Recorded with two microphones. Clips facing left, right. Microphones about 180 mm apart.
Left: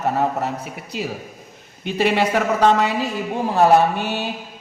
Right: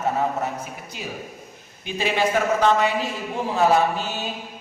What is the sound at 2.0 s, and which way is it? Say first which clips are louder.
A woman's voice: left 3 dB; 60° left (ahead or behind).